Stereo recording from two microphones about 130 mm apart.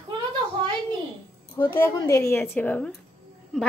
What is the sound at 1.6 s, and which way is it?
A woman's voice, 25° left (ahead or behind).